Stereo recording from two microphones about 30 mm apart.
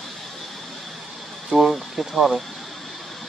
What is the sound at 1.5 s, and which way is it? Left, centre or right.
Speech, right.